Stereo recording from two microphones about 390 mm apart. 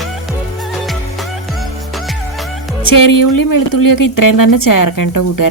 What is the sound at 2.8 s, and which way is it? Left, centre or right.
Speech, left.